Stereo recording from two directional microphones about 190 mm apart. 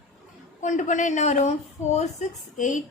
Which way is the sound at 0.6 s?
40° left (ahead or behind).